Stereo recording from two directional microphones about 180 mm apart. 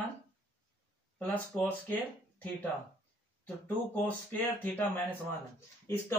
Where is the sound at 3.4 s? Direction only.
10° left (ahead or behind).